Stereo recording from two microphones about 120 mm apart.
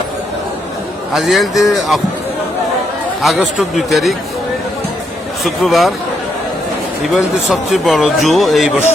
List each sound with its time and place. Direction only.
1.1 s speech: centre (ahead or behind)
3.2 s speech: centre (ahead or behind)
5.4 s speech: centre (ahead or behind)
7.1 s speech: centre (ahead or behind)